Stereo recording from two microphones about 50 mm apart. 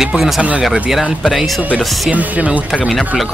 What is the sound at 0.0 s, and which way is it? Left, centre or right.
Speech, centre.